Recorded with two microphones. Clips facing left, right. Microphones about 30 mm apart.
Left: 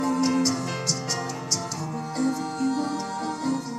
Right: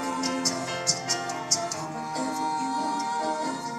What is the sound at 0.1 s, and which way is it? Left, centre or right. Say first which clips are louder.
Music: left 6 dB; centre.